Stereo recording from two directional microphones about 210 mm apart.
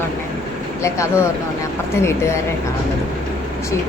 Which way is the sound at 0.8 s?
15° left (ahead or behind).